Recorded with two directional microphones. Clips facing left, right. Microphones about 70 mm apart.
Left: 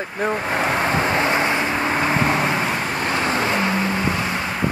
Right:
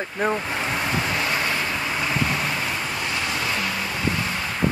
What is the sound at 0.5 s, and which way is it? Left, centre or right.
Vehicle, left.